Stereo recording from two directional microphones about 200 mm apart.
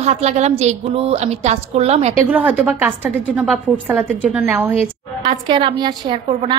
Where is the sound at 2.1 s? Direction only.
10° right (ahead or behind).